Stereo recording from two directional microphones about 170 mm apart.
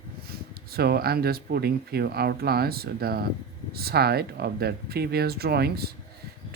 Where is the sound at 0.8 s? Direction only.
65° right (ahead or behind).